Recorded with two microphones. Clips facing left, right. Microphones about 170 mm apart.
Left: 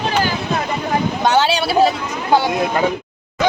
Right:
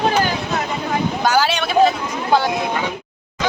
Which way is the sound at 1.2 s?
25° left (ahead or behind).